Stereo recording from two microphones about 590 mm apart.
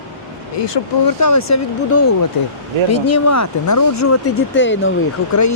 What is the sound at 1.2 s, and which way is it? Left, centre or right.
Speech, left.